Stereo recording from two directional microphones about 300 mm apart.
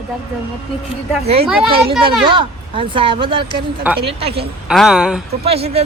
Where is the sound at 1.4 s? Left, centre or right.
Centre.